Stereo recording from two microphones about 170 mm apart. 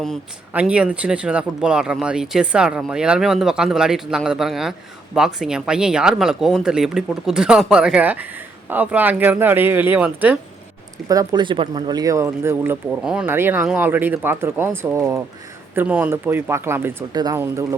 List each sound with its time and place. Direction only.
0.5 s speech: 5° right (ahead or behind)
11.1 s speech: 20° right (ahead or behind)